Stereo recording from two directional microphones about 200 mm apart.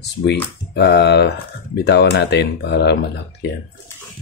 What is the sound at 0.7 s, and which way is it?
Speech, 60° left (ahead or behind).